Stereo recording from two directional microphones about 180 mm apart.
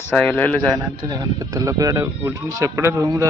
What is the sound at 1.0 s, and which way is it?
Speech, 25° right (ahead or behind).